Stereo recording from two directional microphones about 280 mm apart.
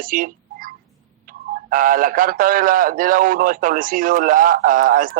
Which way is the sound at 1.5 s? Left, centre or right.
Right.